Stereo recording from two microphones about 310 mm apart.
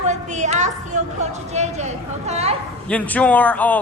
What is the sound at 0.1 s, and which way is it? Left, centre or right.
A woman's voice, right.